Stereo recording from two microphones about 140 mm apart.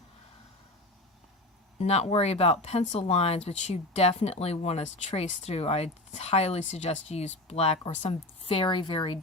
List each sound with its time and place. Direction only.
1.8 s speech: 50° left (ahead or behind)